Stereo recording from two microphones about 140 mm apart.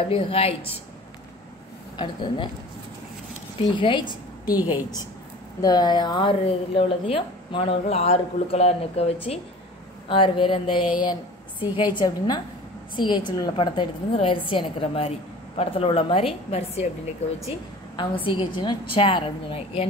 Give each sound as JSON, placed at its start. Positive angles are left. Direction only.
{"t": 0.1, "sound": "a woman's voice", "side_deg": 45}
{"t": 2.0, "sound": "a woman's voice", "side_deg": 35}
{"t": 3.7, "sound": "a woman's voice", "side_deg": 35}
{"t": 4.6, "sound": "a woman's voice", "side_deg": -15}
{"t": 5.6, "sound": "a woman's voice", "side_deg": 30}
{"t": 17.9, "sound": "a woman's voice", "side_deg": 35}